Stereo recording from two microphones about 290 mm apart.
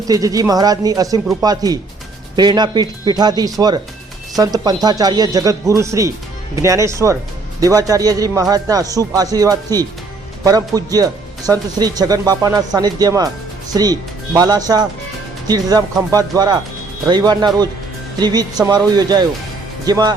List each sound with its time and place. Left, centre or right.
0.1 s speech: centre